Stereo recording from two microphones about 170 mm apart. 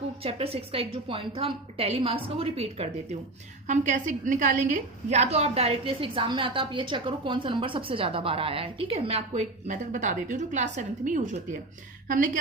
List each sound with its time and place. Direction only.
0.2 s a woman's voice: 35° right (ahead or behind)
3.7 s a woman's voice: 45° right (ahead or behind)